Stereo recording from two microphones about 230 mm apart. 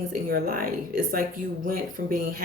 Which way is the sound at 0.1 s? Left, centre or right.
Right.